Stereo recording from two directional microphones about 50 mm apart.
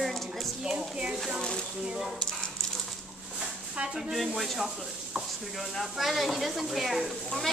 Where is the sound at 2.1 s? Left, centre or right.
Centre.